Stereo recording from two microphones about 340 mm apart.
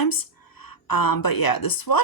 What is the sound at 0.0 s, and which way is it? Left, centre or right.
A woman's voice, left.